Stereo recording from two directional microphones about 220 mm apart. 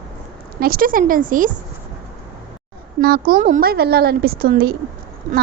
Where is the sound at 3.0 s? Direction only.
45° right (ahead or behind).